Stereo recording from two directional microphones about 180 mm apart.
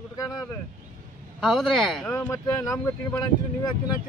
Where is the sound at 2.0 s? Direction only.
10° left (ahead or behind).